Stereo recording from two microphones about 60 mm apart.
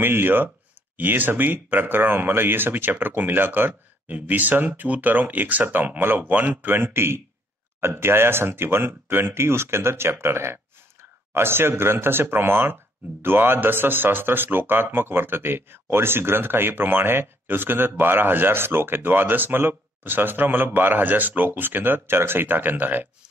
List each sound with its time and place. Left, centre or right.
0.0 s speech: right